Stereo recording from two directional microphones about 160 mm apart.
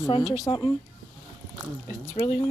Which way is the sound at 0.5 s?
35° left (ahead or behind).